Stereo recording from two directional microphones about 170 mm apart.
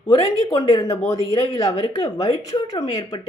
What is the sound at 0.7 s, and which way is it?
A woman's voice, 20° left (ahead or behind).